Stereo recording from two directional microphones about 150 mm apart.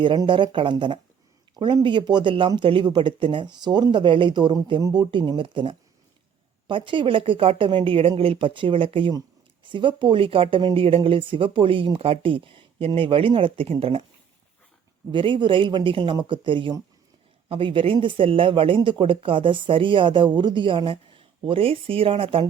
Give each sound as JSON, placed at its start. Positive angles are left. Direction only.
{"t": 0.0, "sound": "speech", "side_deg": -35}
{"t": 15.1, "sound": "speech", "side_deg": -35}